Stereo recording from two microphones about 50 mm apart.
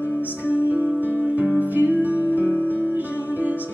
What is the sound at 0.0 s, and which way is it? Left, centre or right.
Music, right.